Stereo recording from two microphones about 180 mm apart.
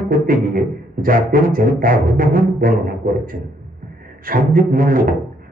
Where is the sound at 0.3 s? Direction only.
50° right (ahead or behind).